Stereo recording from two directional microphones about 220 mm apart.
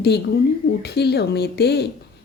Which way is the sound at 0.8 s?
45° left (ahead or behind).